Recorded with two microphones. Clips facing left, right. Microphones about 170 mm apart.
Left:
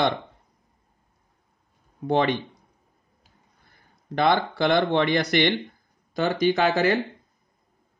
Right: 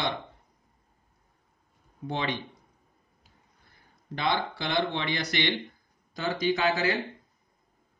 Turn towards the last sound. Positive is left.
turn(degrees=60)  # may be behind; listen again after turning